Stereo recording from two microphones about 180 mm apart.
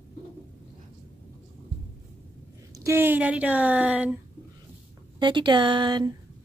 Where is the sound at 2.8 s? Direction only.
10° right (ahead or behind).